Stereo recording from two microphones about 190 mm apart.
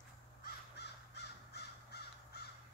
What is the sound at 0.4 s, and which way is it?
Crow, 60° left (ahead or behind).